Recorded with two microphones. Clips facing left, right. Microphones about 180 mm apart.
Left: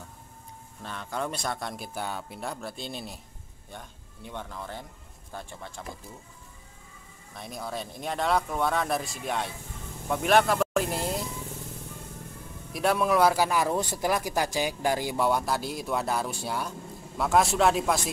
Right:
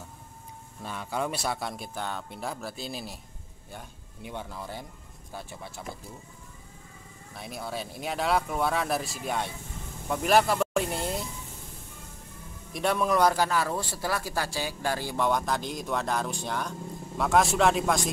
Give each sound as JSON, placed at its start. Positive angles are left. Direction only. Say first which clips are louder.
{"t": 0.8, "sound": "speech", "louder": "right 1 dB", "side_deg": -10}
{"t": 7.3, "sound": "speech", "louder": "even", "side_deg": 0}
{"t": 10.0, "sound": "a sound", "louder": "left 1 dB", "side_deg": 0}
{"t": 12.7, "sound": "a man's voice", "louder": "left 1 dB", "side_deg": 0}